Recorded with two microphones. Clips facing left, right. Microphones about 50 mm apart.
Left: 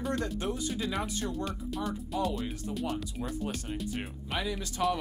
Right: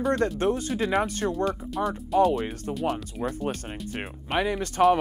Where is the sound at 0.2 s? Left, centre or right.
Right.